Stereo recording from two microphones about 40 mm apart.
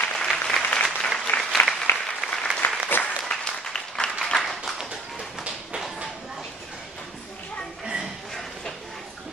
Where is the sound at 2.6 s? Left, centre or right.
Left.